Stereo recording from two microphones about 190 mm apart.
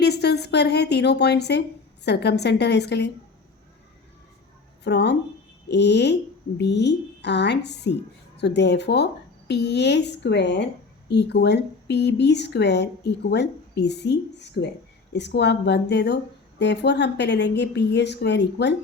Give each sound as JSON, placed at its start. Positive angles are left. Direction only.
{"t": 0.0, "sound": "a woman's voice", "side_deg": 60}
{"t": 4.8, "sound": "a woman's voice", "side_deg": 65}